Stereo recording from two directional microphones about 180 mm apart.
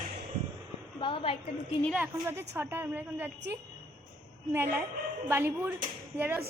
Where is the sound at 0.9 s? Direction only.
30° left (ahead or behind).